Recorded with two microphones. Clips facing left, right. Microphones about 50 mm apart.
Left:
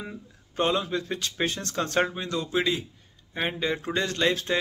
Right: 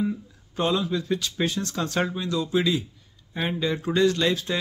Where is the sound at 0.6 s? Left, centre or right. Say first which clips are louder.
Right 1 dB; left.